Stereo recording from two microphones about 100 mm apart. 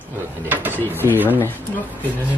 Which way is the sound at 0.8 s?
20° left (ahead or behind).